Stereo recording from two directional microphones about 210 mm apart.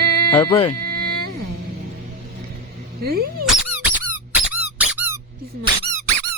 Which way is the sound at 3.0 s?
45° right (ahead or behind).